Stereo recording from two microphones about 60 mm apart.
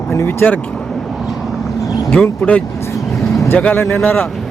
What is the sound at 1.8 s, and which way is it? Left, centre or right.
Vehicle, left.